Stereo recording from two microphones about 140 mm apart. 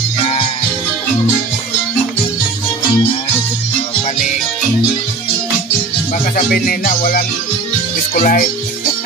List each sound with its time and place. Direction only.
0.2 s music: 45° left (ahead or behind)
6.3 s music: 90° left
8.1 s speech: 80° left